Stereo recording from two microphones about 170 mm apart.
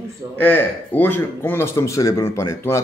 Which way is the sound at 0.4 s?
10° left (ahead or behind).